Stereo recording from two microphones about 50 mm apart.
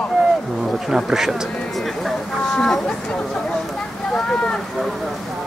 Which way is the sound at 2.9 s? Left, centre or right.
Centre.